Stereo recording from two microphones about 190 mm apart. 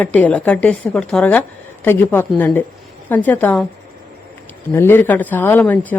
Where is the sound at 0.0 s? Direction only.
10° left (ahead or behind).